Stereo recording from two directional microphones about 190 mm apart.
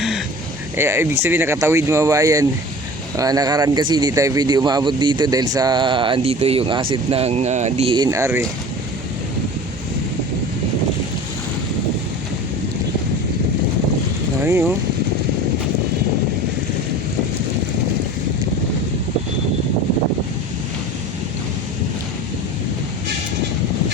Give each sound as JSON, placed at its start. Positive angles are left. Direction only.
{"t": 0.8, "sound": "speech", "side_deg": -15}
{"t": 14.4, "sound": "speech", "side_deg": -10}